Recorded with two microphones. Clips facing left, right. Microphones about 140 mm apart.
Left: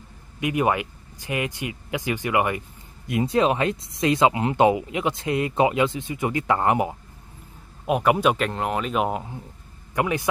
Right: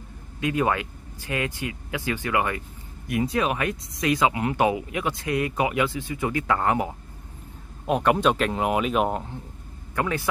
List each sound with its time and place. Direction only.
0.4 s speech: 20° left (ahead or behind)
7.8 s speech: 5° left (ahead or behind)